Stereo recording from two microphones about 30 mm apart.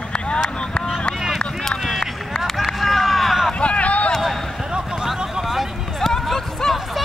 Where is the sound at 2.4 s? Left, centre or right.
Centre.